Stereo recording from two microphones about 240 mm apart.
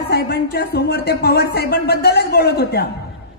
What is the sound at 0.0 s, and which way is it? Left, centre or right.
Speech, left.